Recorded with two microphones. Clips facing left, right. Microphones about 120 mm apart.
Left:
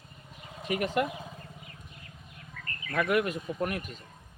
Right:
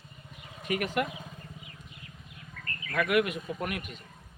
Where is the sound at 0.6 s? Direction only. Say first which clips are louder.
Left 1 dB; 30° left (ahead or behind).